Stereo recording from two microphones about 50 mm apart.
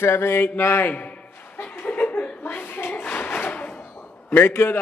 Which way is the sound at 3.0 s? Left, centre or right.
Left.